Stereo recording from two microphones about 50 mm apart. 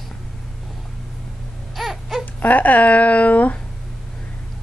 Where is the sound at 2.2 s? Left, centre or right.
Left.